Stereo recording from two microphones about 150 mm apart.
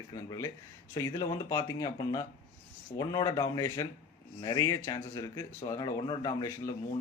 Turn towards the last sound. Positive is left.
turn(degrees=25)  # may be behind; listen again after turning